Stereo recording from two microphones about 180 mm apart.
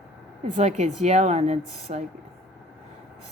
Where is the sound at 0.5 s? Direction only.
40° right (ahead or behind).